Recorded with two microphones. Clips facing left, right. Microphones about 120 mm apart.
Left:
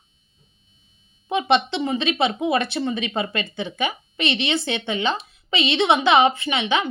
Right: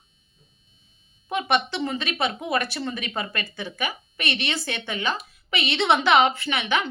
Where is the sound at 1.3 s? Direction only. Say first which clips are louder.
Left 4 dB; 20° left (ahead or behind).